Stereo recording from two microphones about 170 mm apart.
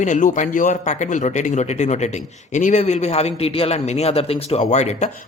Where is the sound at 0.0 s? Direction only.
45° left (ahead or behind).